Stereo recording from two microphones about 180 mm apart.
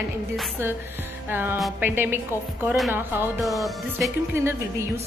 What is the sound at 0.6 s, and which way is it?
Speech, 15° right (ahead or behind).